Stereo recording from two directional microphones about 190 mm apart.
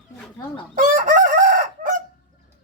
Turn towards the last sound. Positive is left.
turn(degrees=-45)  # may be behind; listen again after turning